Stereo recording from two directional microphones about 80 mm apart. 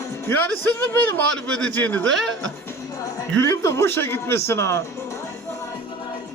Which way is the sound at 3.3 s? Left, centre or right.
Left.